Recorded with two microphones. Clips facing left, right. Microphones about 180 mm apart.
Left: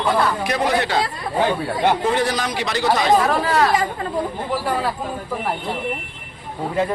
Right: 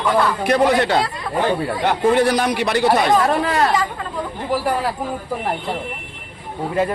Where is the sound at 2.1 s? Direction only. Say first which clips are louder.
Right 5 dB; 60° right (ahead or behind).